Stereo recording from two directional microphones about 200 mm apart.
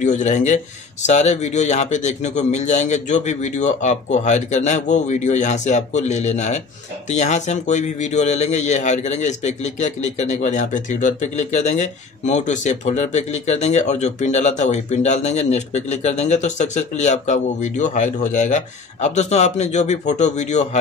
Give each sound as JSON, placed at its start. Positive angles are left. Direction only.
{"t": 0.0, "sound": "a man's voice", "side_deg": 35}